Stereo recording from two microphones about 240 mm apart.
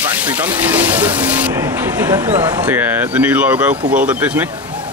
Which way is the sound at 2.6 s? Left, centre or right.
Centre.